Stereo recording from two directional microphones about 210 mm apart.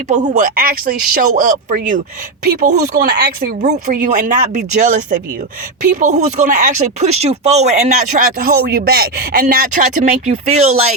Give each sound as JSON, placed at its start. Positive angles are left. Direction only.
{"t": 0.1, "sound": "speech", "side_deg": -35}
{"t": 3.6, "sound": "speech", "side_deg": -35}
{"t": 8.4, "sound": "speech", "side_deg": -45}